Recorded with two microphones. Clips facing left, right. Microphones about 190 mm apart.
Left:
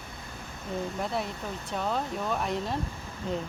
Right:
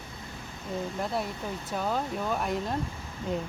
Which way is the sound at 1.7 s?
5° right (ahead or behind).